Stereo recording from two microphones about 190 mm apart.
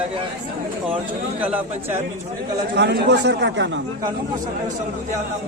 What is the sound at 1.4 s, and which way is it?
Speech, 5° right (ahead or behind).